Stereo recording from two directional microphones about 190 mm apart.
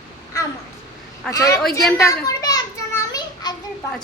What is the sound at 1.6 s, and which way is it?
Speech, centre (ahead or behind).